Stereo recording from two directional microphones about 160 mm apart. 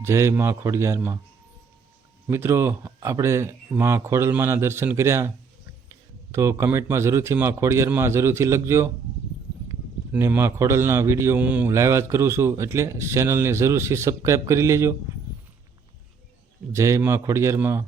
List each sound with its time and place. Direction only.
0.0 s a man's voice: 15° right (ahead or behind)
2.2 s a man's voice: 15° right (ahead or behind)
6.3 s a man's voice: 15° right (ahead or behind)
10.1 s a man's voice: 15° right (ahead or behind)
16.7 s a man's voice: 20° right (ahead or behind)